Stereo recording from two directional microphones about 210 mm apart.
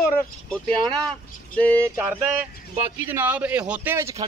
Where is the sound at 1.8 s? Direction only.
10° right (ahead or behind).